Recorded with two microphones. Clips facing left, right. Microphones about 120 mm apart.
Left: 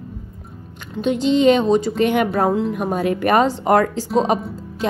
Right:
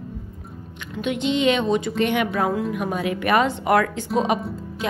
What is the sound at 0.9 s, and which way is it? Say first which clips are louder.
A woman's voice: left 5 dB; 35° left (ahead or behind).